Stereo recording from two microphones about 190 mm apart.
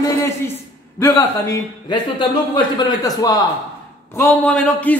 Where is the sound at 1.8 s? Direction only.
25° left (ahead or behind).